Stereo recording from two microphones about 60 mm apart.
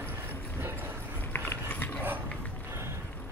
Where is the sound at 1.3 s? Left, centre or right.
Left.